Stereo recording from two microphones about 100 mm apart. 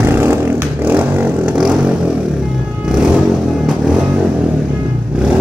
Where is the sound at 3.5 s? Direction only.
5° right (ahead or behind).